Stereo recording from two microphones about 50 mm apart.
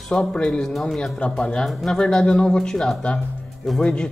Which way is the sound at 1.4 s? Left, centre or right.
Centre.